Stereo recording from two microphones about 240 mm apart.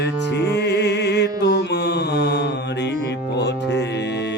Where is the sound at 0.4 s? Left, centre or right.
Left.